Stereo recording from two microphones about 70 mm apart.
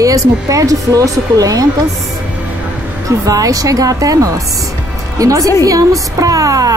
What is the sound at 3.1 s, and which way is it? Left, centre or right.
A woman's voice, right.